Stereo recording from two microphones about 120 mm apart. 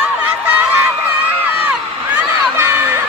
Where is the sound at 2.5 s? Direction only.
20° right (ahead or behind).